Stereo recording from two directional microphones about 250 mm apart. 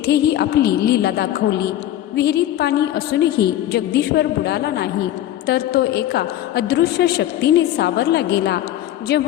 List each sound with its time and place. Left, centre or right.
0.0 s a woman's voice: left